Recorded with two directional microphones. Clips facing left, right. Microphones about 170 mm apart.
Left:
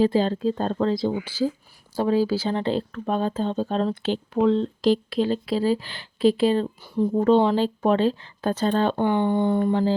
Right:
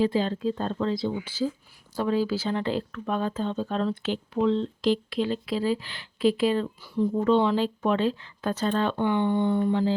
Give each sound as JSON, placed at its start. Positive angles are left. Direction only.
{"t": 0.0, "sound": "speech", "side_deg": 35}
{"t": 4.4, "sound": "speech", "side_deg": 45}